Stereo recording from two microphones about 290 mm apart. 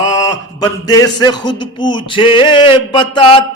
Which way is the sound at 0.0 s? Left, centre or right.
Centre.